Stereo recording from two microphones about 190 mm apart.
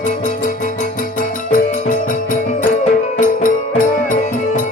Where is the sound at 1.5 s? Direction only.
45° left (ahead or behind).